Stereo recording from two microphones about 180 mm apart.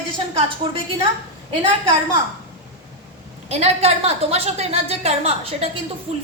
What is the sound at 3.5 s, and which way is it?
A woman's voice, 35° right (ahead or behind).